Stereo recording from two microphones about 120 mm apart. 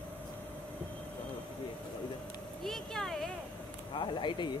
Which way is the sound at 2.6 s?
5° left (ahead or behind).